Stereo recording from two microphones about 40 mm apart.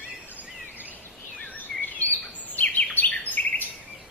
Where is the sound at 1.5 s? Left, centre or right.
Left.